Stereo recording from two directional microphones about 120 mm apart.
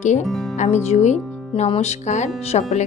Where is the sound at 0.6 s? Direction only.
75° left (ahead or behind).